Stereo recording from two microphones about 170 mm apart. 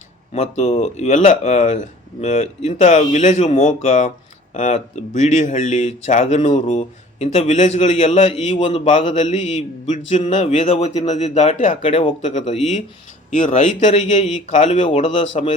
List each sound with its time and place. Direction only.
0.3 s speech: 40° left (ahead or behind)